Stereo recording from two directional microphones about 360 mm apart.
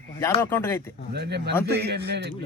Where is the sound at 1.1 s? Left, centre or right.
Right.